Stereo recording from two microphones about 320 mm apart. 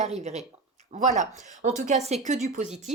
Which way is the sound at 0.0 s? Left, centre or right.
Right.